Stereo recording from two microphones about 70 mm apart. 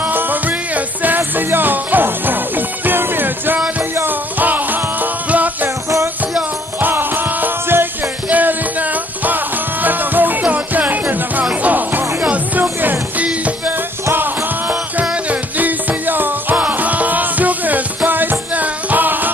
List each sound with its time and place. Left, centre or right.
0.0 s music: right
6.8 s music: right